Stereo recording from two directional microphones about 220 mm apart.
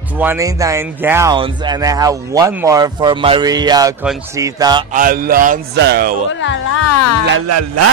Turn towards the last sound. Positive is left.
turn(degrees=-80)